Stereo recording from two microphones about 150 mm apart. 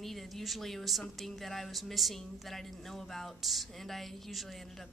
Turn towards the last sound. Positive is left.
turn(degrees=0)  # may be behind; listen again after turning